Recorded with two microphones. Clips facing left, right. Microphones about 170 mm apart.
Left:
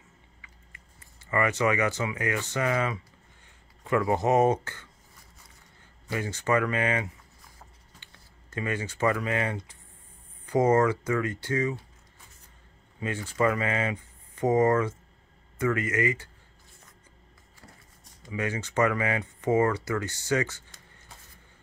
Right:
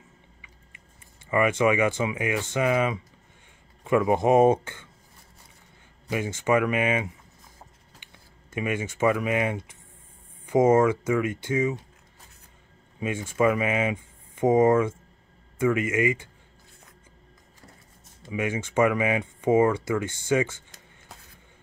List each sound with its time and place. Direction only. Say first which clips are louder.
1.3 s speech: right 4 dB; 15° right (ahead or behind)
6.0 s speech: right 3 dB; 15° right (ahead or behind)
8.5 s speech: right 3 dB; 15° right (ahead or behind)
10.4 s a sound: right 4 dB; 20° right (ahead or behind)
10.9 s speech: right 3 dB; 20° right (ahead or behind)
13.0 s speech: right 3 dB; 15° right (ahead or behind)
18.3 s speech: right 3 dB; 20° right (ahead or behind)
19.7 s speech: right 3 dB; 25° right (ahead or behind)